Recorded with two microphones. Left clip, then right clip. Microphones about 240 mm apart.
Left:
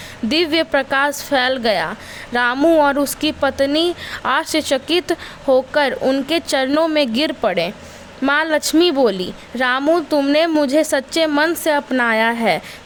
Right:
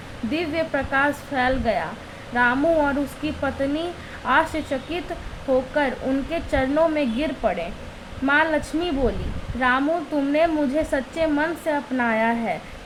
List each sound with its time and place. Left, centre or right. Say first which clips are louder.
0.3 s a woman's voice: left 8 dB; left